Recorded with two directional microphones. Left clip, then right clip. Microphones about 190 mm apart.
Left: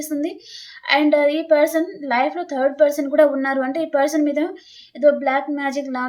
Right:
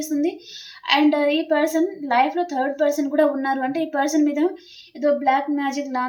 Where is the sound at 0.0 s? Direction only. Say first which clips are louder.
Right 1 dB; 30° left (ahead or behind).